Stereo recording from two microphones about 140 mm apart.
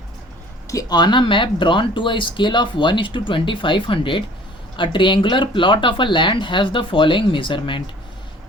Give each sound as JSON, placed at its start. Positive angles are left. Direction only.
{"t": 0.7, "sound": "speech", "side_deg": 25}